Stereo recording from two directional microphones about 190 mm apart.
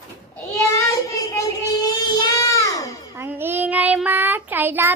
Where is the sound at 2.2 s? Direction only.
15° left (ahead or behind).